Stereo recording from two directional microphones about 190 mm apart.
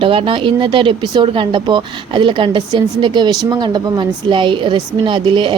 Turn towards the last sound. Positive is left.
turn(degrees=-25)  # may be behind; listen again after turning